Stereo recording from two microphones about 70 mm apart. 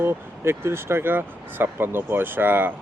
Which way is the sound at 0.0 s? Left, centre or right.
Right.